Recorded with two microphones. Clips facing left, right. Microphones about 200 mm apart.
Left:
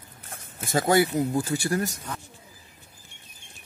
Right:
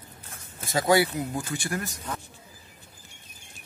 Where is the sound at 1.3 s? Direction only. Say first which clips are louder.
Left 6 dB; 35° left (ahead or behind).